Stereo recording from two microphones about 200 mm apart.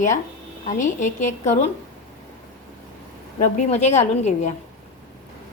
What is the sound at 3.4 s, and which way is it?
A woman's voice, 35° left (ahead or behind).